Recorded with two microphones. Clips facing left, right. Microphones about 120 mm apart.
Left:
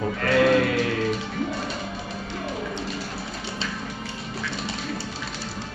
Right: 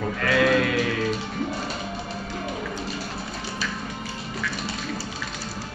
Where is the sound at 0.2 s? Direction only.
40° left (ahead or behind).